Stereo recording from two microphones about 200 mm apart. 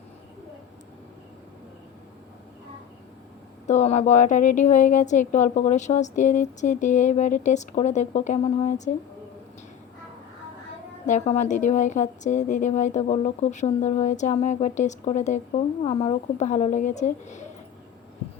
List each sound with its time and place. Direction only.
3.7 s a woman's voice: 35° left (ahead or behind)
11.0 s a woman's voice: 35° left (ahead or behind)